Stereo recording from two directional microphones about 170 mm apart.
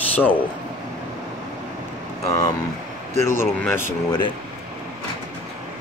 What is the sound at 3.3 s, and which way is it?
Speech, 15° left (ahead or behind).